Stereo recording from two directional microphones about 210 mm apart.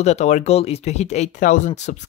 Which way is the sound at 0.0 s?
35° left (ahead or behind).